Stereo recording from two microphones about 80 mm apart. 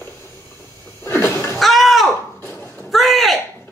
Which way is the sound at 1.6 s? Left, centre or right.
Centre.